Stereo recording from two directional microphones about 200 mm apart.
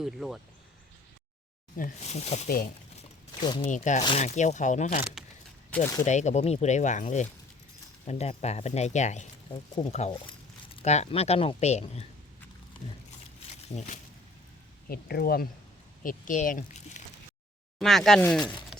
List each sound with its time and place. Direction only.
0.0 s speech: centre (ahead or behind)
1.7 s speech: 40° left (ahead or behind)
3.4 s speech: 20° left (ahead or behind)
3.7 s speech: 35° left (ahead or behind)
5.7 s speech: 15° left (ahead or behind)
6.1 s speech: 35° left (ahead or behind)
13.7 s speech: 35° left (ahead or behind)
14.8 s speech: 50° left (ahead or behind)
16.0 s speech: 40° left (ahead or behind)
17.7 s speech: centre (ahead or behind)